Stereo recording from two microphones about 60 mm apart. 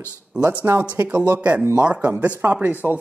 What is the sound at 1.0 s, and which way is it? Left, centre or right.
Speech, right.